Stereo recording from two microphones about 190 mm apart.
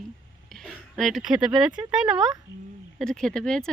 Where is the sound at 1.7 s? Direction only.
25° right (ahead or behind).